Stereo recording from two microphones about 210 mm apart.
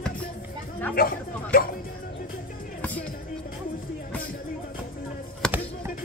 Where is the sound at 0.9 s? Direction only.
45° left (ahead or behind).